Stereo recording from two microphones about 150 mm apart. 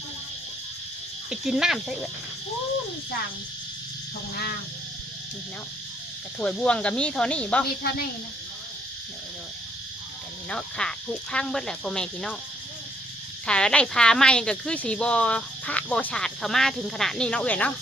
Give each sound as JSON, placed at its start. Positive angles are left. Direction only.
{"t": 1.3, "sound": "speech", "side_deg": -5}
{"t": 6.4, "sound": "speech", "side_deg": 5}
{"t": 7.8, "sound": "speech", "side_deg": 90}
{"t": 10.5, "sound": "speech", "side_deg": 5}
{"t": 13.5, "sound": "speech", "side_deg": 5}